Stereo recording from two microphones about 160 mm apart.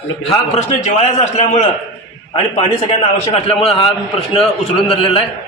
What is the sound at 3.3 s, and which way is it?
A man's voice, 35° left (ahead or behind).